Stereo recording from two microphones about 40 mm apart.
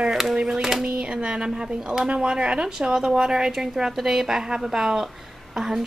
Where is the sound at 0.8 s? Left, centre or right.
Right.